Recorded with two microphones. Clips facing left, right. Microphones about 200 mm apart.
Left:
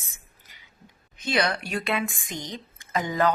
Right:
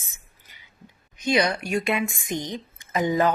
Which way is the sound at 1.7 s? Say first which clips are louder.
Right 3 dB; 15° right (ahead or behind).